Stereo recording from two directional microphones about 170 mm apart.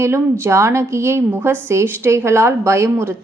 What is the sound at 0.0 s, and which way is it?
A woman's voice, 15° right (ahead or behind).